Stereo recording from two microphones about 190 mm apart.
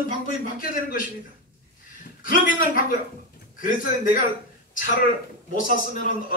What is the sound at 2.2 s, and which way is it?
A man's voice, 45° left (ahead or behind).